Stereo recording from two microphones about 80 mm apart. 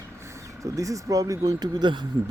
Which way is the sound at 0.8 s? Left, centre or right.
Right.